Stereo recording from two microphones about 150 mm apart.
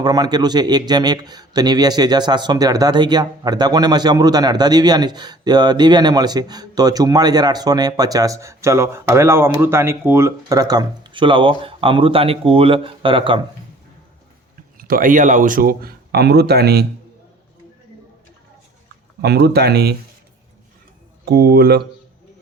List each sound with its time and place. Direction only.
0.0 s speech: 25° right (ahead or behind)
14.8 s speech: 70° right (ahead or behind); by 16.8 s 90° right
19.2 s speech: 90° right
21.2 s speech: 90° right